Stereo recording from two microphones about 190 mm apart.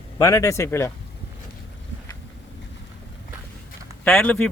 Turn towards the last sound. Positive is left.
turn(degrees=5)  # may be behind; listen again after turning